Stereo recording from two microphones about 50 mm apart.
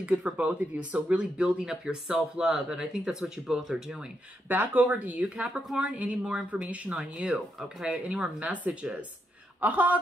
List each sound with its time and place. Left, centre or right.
0.0 s speech: right; by 4.0 s centre
4.5 s speech: right
6.9 s speech: centre
9.6 s speech: right